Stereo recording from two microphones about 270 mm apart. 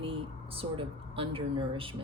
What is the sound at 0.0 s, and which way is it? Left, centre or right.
Speech, centre.